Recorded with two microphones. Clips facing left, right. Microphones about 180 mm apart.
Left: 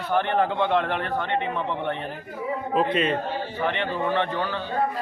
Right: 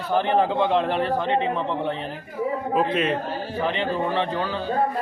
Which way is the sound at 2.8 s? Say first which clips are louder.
Even; 5° right (ahead or behind).